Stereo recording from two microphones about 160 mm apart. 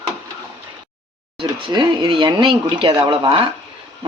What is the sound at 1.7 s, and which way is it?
Speech, 30° right (ahead or behind).